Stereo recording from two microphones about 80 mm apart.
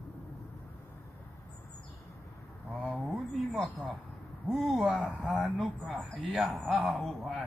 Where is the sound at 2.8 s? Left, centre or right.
Centre.